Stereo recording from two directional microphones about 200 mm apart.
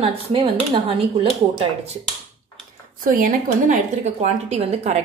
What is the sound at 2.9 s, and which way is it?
A woman's voice, 45° right (ahead or behind).